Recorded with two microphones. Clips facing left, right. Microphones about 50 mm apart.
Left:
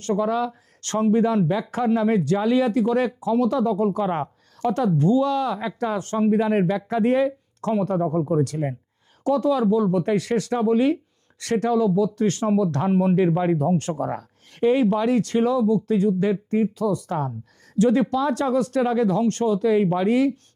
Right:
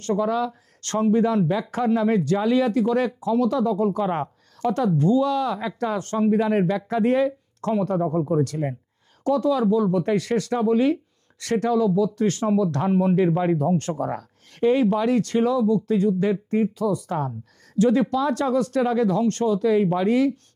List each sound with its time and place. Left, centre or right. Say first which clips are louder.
0.0 s speech: even; centre
9.3 s speech: even; left
9.6 s speech: even; centre